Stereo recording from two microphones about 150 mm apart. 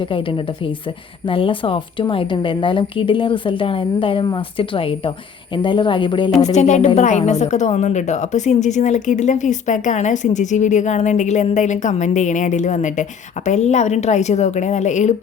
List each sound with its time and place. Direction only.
0.0 s a woman's voice: 35° left (ahead or behind)
6.4 s a woman's voice: 50° left (ahead or behind)